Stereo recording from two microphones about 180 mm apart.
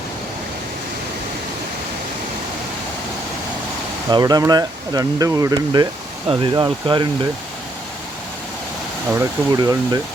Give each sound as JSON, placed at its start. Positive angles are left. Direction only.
{"t": 4.1, "sound": "speech", "side_deg": -20}
{"t": 9.1, "sound": "speech", "side_deg": -20}